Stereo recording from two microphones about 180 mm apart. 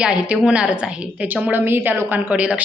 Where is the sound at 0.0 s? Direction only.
5° right (ahead or behind).